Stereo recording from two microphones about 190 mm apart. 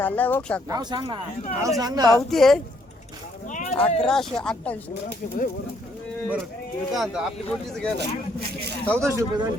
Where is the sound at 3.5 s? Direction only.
35° left (ahead or behind).